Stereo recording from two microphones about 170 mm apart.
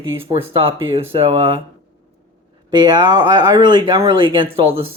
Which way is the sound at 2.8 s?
25° right (ahead or behind).